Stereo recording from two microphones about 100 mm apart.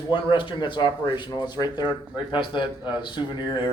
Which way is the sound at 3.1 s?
50° left (ahead or behind).